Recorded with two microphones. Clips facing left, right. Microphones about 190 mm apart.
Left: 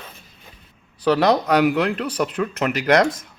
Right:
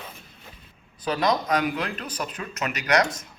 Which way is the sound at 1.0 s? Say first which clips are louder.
Left 7 dB; 70° left (ahead or behind).